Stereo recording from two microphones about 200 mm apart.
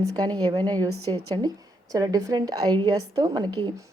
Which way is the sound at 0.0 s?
20° right (ahead or behind).